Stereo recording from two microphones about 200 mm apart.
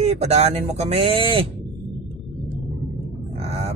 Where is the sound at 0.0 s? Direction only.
35° right (ahead or behind).